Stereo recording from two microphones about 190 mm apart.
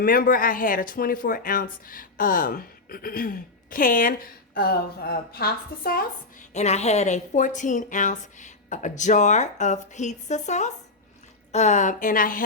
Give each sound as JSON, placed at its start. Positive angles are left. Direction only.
{"t": 0.0, "sound": "speech", "side_deg": 50}
{"t": 6.5, "sound": "speech", "side_deg": 35}